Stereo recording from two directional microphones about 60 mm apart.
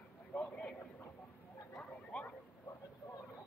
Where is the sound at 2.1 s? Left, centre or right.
Centre.